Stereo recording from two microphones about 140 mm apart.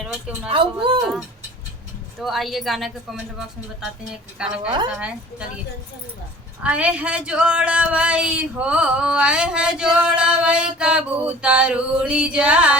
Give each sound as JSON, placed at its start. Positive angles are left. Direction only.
{"t": 0.0, "sound": "a sound", "side_deg": -10}
{"t": 0.4, "sound": "a woman's voice", "side_deg": -40}
{"t": 2.2, "sound": "a woman's voice", "side_deg": 0}
{"t": 6.6, "sound": "speech", "side_deg": -10}